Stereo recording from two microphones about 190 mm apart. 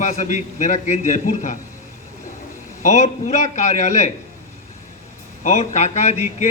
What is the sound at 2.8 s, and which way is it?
A man's voice, 35° left (ahead or behind).